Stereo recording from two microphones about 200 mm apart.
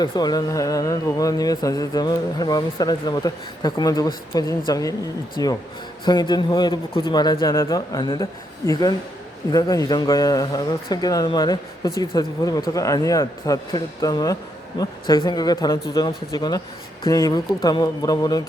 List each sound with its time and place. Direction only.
0.0 s a man's voice: 20° left (ahead or behind)